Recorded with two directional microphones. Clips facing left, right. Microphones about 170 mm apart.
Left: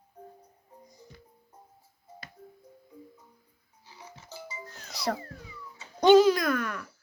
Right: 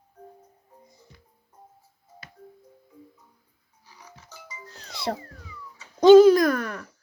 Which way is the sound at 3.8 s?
30° left (ahead or behind).